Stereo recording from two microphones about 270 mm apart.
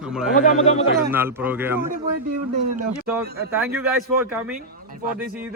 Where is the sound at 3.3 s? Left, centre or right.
Right.